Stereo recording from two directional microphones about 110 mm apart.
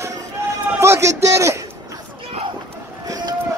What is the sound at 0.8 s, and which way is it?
Speech, 25° right (ahead or behind).